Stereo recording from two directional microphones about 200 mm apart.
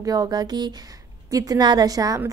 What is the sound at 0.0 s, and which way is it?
A woman's voice, 20° right (ahead or behind).